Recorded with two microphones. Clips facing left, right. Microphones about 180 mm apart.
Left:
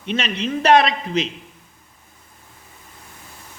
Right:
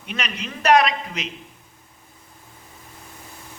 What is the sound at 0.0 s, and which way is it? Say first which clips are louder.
A man's voice: left 7 dB; 25° left (ahead or behind).